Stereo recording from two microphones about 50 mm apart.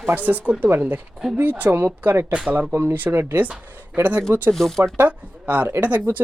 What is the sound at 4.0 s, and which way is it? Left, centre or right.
Speech, right.